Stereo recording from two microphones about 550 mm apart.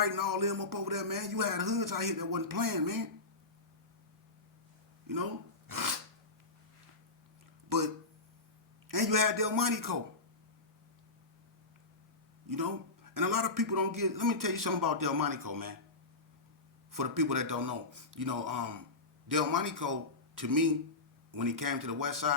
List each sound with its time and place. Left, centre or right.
0.0 s a man's voice: right
5.6 s filing: right
8.9 s a man's voice: right
12.5 s a man's voice: right
16.9 s a man's voice: right